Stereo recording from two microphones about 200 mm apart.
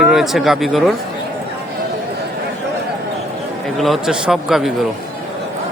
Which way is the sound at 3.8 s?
Centre (ahead or behind).